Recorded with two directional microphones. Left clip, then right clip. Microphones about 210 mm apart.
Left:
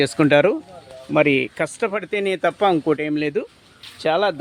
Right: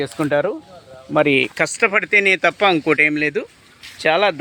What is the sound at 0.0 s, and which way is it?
Speech, 40° left (ahead or behind).